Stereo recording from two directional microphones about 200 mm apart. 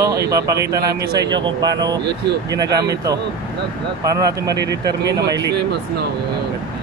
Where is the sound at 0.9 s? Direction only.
50° right (ahead or behind).